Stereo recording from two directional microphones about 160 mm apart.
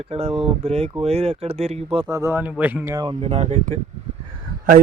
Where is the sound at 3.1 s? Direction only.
45° right (ahead or behind).